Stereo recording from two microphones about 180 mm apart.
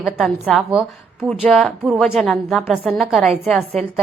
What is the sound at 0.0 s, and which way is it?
A woman's voice, centre (ahead or behind).